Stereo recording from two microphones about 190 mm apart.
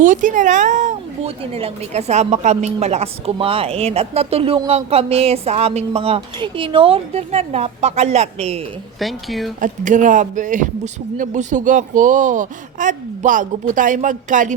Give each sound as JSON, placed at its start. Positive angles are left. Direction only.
{"t": 0.0, "sound": "speech", "side_deg": -40}
{"t": 9.0, "sound": "speech", "side_deg": 0}
{"t": 9.6, "sound": "speech", "side_deg": -40}